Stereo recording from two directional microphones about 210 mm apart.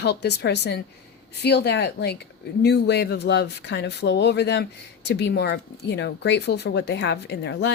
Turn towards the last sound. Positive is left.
turn(degrees=55)  # may be behind; listen again after turning